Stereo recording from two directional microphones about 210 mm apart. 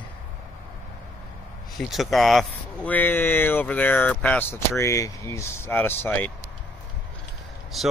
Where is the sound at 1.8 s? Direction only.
Centre (ahead or behind).